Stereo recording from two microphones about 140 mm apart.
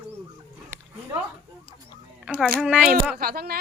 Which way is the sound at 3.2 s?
90° right.